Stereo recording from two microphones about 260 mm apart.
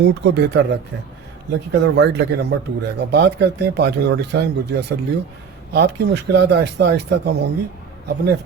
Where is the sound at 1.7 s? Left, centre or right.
Right.